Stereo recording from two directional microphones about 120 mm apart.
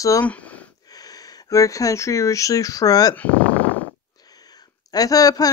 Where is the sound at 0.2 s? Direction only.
10° left (ahead or behind).